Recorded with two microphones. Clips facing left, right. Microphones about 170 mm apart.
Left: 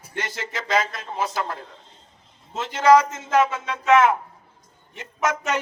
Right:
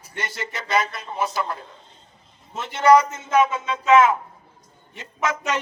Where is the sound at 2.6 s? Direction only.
90° left.